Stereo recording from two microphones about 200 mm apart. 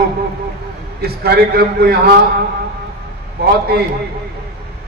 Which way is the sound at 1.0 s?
50° right (ahead or behind).